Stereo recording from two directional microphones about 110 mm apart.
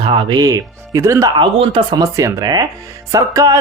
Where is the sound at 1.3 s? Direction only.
50° right (ahead or behind).